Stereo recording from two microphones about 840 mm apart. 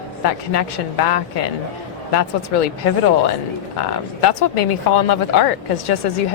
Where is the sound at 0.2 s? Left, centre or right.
Left.